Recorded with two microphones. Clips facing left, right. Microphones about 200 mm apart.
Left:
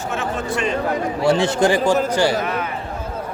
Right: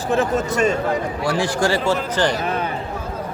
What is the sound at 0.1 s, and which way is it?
Speech, 40° right (ahead or behind).